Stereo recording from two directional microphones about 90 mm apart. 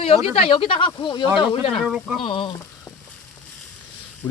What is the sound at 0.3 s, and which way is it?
Speech, 85° left.